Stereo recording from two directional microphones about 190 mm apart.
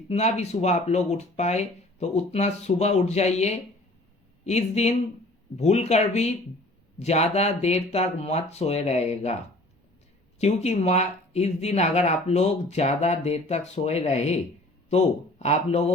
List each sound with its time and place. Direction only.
0.1 s speech: 35° left (ahead or behind)
10.3 s speech: 35° left (ahead or behind)